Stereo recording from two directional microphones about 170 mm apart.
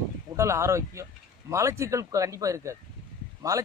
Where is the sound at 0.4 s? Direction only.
15° right (ahead or behind).